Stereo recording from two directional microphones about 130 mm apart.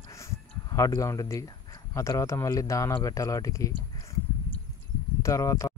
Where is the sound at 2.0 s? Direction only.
25° left (ahead or behind).